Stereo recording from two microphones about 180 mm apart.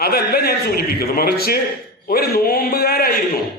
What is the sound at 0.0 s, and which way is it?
A man's voice, 60° left (ahead or behind).